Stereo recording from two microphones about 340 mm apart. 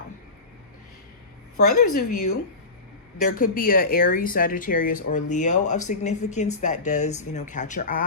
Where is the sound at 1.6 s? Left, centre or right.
Left.